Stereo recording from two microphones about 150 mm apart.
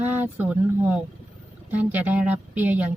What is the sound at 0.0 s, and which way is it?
Speech, 10° right (ahead or behind).